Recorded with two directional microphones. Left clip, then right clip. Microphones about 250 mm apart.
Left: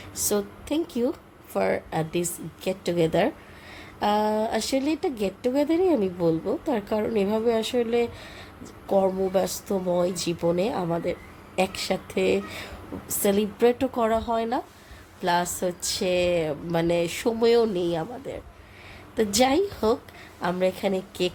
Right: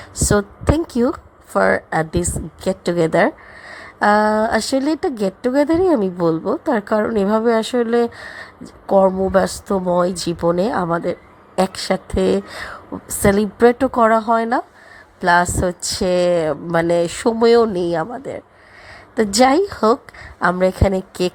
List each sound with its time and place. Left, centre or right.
0.2 s speech: right